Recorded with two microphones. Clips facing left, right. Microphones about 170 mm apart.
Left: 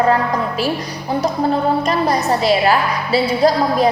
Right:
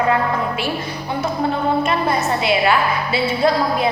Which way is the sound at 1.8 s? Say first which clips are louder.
Left 2 dB; 40° left (ahead or behind).